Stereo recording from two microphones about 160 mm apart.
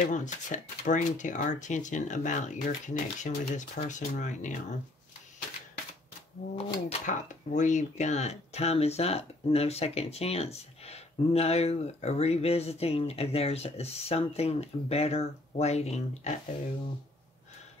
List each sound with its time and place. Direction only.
0.0 s speech: 50° left (ahead or behind)
6.5 s speech: 45° left (ahead or behind)